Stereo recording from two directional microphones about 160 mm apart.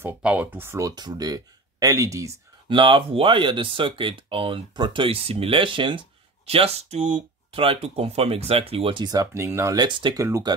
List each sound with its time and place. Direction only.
0.0 s speech: 5° right (ahead or behind)
2.7 s speech: 30° right (ahead or behind)
10.2 s speech: 20° right (ahead or behind)